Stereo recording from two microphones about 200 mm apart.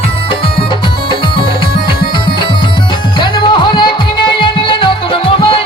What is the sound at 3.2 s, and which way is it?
Music, 25° left (ahead or behind).